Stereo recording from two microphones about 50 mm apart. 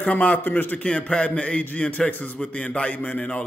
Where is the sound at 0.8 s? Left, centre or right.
Left.